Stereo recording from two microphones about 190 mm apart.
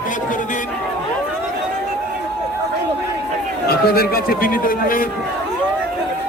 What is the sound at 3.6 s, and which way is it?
Speech, 50° left (ahead or behind).